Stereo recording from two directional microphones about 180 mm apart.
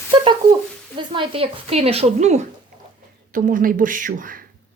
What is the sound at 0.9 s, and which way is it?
A woman's voice, 25° right (ahead or behind).